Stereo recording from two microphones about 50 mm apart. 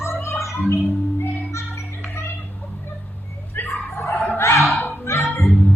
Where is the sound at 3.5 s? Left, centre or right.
Left.